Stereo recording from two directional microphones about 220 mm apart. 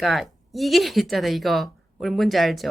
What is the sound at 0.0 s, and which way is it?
Speech, centre (ahead or behind).